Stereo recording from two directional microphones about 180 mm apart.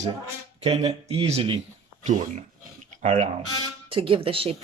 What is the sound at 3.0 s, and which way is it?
Speech, 40° right (ahead or behind).